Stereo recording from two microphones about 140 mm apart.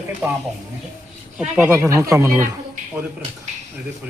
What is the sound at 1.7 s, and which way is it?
Speech, 20° right (ahead or behind).